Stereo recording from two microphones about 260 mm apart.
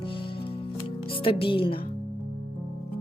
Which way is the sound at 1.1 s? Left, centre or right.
Centre.